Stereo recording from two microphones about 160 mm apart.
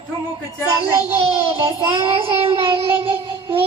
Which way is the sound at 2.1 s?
35° right (ahead or behind).